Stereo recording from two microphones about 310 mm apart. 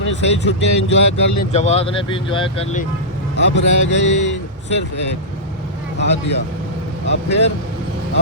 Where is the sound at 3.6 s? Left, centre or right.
Left.